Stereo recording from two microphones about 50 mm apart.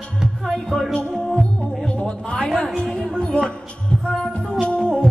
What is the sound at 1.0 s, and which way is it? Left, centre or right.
Music, centre.